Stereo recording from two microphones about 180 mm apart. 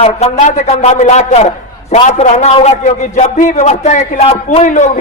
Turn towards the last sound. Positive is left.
turn(degrees=40)  # may be behind; listen again after turning